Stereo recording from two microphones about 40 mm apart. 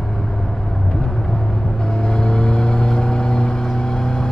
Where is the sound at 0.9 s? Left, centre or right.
Centre.